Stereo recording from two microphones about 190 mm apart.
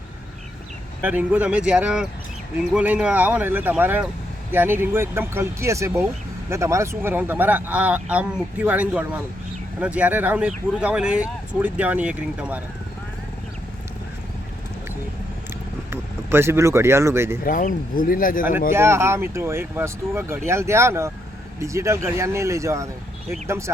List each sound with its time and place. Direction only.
1.0 s speech: 10° right (ahead or behind)
15.9 s speech: 15° right (ahead or behind)
17.4 s speech: 45° left (ahead or behind)
18.7 s speech: 15° right (ahead or behind)